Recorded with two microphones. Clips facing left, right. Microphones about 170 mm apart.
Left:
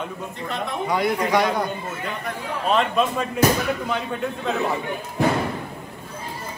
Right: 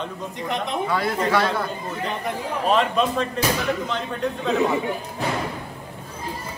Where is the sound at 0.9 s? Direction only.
15° left (ahead or behind).